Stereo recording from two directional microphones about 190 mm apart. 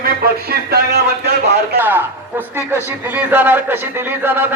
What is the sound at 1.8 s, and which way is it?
A man's voice, 10° right (ahead or behind).